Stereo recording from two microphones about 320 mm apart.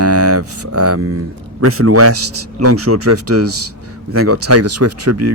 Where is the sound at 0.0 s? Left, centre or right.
Right.